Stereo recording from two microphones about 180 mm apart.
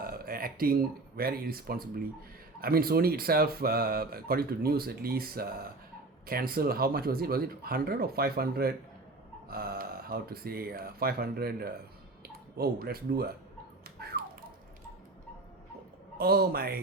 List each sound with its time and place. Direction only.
0.0 s speech: 55° right (ahead or behind)
14.0 s a sound: 60° right (ahead or behind)
16.1 s speech: 60° right (ahead or behind)